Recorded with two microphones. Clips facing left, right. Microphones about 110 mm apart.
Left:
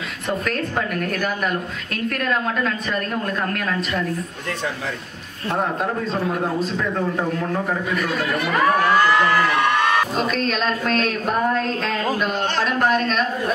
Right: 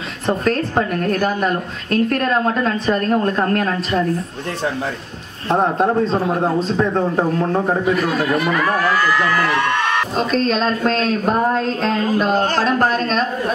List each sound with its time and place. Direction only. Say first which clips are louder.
0.3 s a woman's voice: right 6 dB; 30° right (ahead or behind)
5.5 s a woman's voice: right 7 dB; 30° right (ahead or behind)
10.1 s a woman's voice: right 4 dB; 35° right (ahead or behind)